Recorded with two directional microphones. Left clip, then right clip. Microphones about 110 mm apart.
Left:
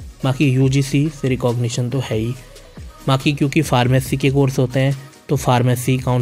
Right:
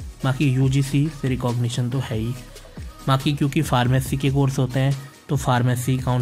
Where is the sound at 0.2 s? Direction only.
40° left (ahead or behind).